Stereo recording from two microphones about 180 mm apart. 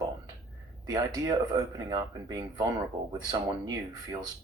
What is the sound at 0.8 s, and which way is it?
Speech, 20° right (ahead or behind).